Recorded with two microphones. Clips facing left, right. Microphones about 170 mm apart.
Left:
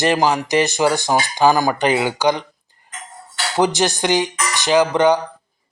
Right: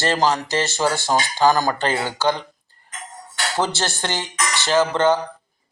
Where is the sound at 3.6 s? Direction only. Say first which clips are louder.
Left 7 dB; 15° left (ahead or behind).